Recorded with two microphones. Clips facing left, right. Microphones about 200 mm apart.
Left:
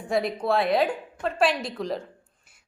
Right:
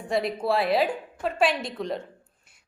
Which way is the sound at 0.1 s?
Centre (ahead or behind).